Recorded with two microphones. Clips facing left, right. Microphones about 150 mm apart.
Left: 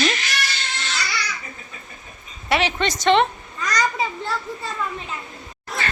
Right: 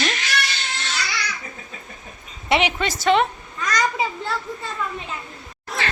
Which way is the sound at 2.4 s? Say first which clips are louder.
Right 1 dB; 20° right (ahead or behind).